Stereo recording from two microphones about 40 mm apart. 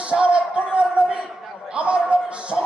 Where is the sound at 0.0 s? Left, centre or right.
Right.